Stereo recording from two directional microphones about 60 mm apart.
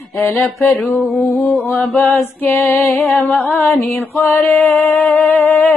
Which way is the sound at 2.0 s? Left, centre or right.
Left.